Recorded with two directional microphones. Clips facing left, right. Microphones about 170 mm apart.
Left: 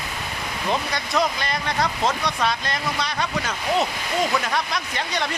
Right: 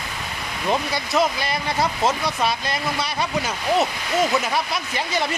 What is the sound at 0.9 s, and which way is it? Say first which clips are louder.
Speech: right 2 dB; 5° right (ahead or behind).